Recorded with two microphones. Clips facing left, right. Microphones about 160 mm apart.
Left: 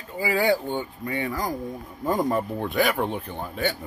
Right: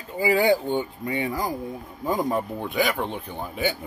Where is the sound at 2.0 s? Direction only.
Centre (ahead or behind).